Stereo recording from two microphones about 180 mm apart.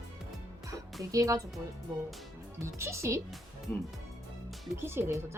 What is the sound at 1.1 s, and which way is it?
Speech, 20° right (ahead or behind).